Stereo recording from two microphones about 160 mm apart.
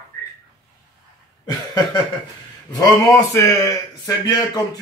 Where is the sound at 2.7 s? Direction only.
20° left (ahead or behind).